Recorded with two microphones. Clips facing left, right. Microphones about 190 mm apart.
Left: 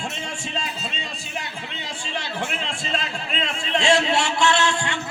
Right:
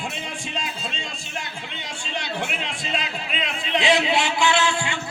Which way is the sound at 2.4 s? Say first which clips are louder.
Left 1 dB; centre (ahead or behind).